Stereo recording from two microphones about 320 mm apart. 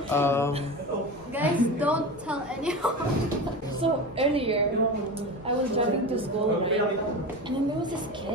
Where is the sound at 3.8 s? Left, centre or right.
Centre.